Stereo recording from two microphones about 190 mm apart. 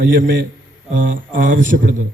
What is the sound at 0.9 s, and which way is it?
A man's voice, 45° right (ahead or behind).